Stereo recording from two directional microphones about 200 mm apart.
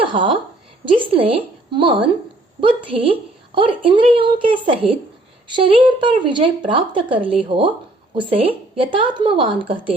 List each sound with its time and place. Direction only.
0.1 s a woman's voice: 25° right (ahead or behind)